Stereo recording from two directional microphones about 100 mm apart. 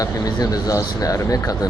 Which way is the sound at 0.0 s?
40° left (ahead or behind).